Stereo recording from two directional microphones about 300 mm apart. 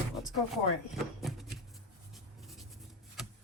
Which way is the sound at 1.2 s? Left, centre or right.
Centre.